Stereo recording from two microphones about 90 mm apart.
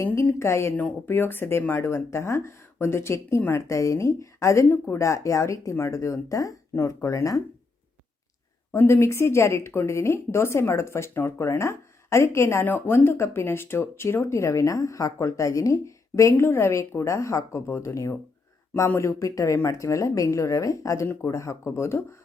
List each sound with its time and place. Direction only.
0.3 s speech: 30° left (ahead or behind)
0.8 s speech: 20° left (ahead or behind); by 7.4 s 35° left (ahead or behind)
8.7 s speech: 30° left (ahead or behind)